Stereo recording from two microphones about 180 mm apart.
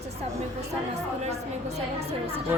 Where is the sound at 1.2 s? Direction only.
35° right (ahead or behind).